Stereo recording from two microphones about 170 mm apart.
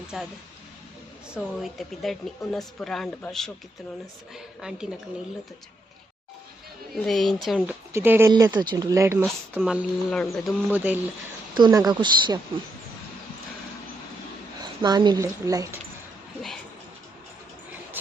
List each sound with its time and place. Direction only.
0.1 s speech: 5° right (ahead or behind)
1.3 s speech: centre (ahead or behind)
6.9 s speech: centre (ahead or behind)
8.3 s speech: 25° right (ahead or behind)
9.2 s speech: centre (ahead or behind)
10.7 s speech: 10° right (ahead or behind)
11.5 s speech: 25° right (ahead or behind)
14.6 s speech: 25° right (ahead or behind)